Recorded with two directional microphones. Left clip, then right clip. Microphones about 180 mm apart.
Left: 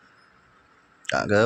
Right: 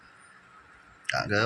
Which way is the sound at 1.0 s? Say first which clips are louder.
Left 5 dB; 65° left (ahead or behind).